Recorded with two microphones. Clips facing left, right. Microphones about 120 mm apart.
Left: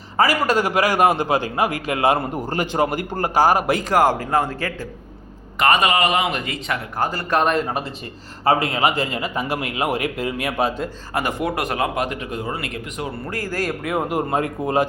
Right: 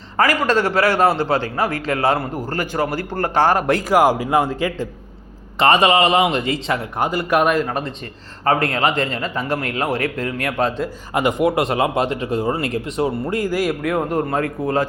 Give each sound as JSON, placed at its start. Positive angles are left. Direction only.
{"t": 0.2, "sound": "a man's voice", "side_deg": 10}
{"t": 3.8, "sound": "a man's voice", "side_deg": -10}
{"t": 5.5, "sound": "speech", "side_deg": -30}
{"t": 7.0, "sound": "a man's voice", "side_deg": -15}
{"t": 7.7, "sound": "a man's voice", "side_deg": 5}
{"t": 11.1, "sound": "speech", "side_deg": -20}
{"t": 13.2, "sound": "a man's voice", "side_deg": -20}
{"t": 13.8, "sound": "a man's voice", "side_deg": 5}
{"t": 14.3, "sound": "speech", "side_deg": 20}